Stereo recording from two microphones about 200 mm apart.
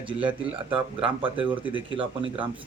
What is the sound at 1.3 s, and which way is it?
Speech, 10° right (ahead or behind).